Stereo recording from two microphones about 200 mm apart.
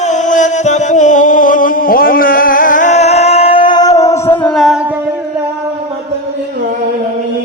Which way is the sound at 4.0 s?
15° left (ahead or behind).